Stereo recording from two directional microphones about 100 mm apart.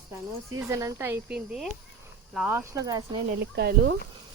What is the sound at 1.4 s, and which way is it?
Speech, 5° right (ahead or behind).